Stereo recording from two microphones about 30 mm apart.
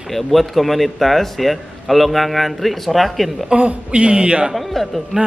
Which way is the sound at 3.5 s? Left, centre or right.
Right.